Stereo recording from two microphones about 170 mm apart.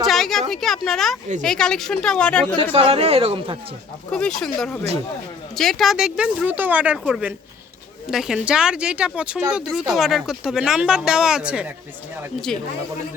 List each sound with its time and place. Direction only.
0.0 s a sound: centre (ahead or behind)
1.4 s speech: 5° left (ahead or behind)
2.7 s speech: 35° right (ahead or behind)
4.1 s speech: 5° left (ahead or behind)